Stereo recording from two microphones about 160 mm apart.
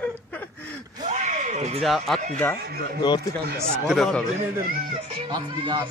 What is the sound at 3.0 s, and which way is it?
Speech, 25° left (ahead or behind).